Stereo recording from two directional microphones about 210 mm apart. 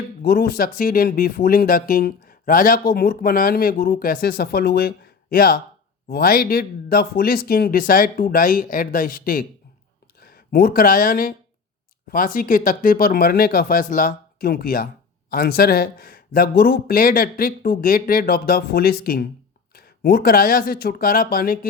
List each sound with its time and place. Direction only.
0.2 s speech: 45° left (ahead or behind)